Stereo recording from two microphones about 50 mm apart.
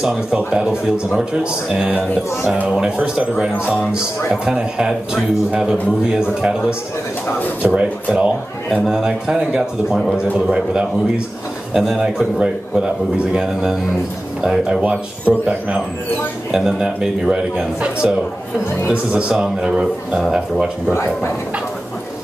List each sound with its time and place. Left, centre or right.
0.0 s a man's voice: centre
4.3 s a man's voice: centre
7.6 s speech: right
8.8 s a man's voice: centre
11.7 s a man's voice: centre
14.8 s speech: right
16.5 s a man's voice: centre
20.9 s speech: left